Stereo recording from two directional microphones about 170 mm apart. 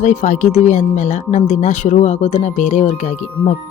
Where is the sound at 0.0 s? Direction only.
45° left (ahead or behind).